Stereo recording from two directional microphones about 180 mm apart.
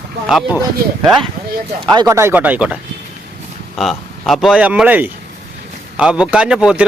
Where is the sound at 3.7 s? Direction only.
Centre (ahead or behind).